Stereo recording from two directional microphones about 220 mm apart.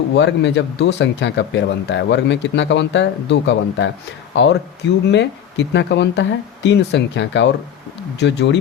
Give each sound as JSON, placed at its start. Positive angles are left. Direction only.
{"t": 0.1, "sound": "speech", "side_deg": 55}
{"t": 5.0, "sound": "speech", "side_deg": 50}